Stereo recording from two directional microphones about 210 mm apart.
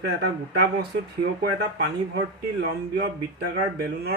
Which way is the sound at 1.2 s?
45° right (ahead or behind).